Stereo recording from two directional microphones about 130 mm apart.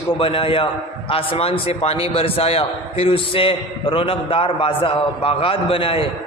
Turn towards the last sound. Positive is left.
turn(degrees=45)  # may be behind; listen again after turning